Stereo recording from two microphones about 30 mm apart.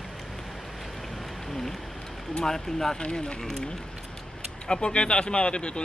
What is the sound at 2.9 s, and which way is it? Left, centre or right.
Speech, left.